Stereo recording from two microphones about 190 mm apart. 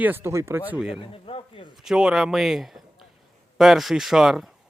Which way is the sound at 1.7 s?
Centre (ahead or behind).